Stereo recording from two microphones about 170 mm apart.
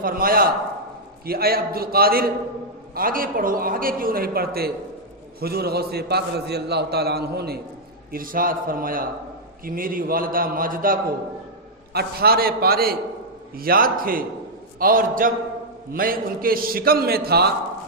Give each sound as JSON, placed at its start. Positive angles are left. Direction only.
{"t": 0.0, "sound": "a man's voice", "side_deg": -60}
{"t": 8.1, "sound": "a man's voice", "side_deg": -55}